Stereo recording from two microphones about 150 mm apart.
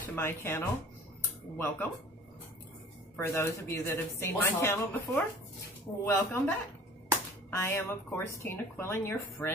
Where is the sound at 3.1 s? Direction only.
15° left (ahead or behind).